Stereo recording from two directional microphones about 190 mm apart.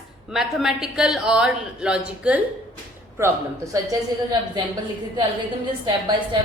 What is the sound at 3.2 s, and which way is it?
A woman's voice, 15° right (ahead or behind).